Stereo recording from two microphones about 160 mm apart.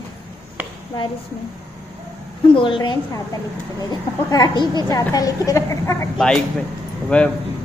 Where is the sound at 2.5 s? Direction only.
30° left (ahead or behind).